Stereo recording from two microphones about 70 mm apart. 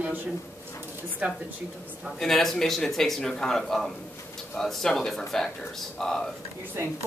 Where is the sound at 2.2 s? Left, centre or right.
Centre.